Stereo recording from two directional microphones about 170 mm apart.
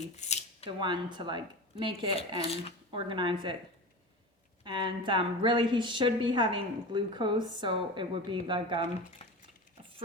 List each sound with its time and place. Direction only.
0.0 s speech: 45° left (ahead or behind)
0.8 s a woman's voice: 25° right (ahead or behind)
4.6 s a woman's voice: 30° right (ahead or behind)
9.2 s a sound: 35° left (ahead or behind)